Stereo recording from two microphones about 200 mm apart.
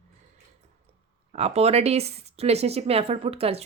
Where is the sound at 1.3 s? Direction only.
30° right (ahead or behind).